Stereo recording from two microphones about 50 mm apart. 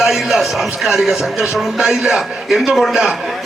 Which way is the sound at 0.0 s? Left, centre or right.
Centre.